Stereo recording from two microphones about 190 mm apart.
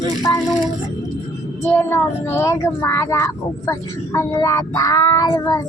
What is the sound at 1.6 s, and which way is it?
Speech, 10° left (ahead or behind).